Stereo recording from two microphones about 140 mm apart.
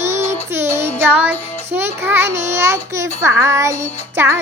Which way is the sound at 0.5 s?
20° right (ahead or behind).